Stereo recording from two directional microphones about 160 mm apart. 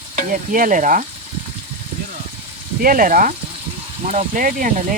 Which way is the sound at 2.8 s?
60° right (ahead or behind).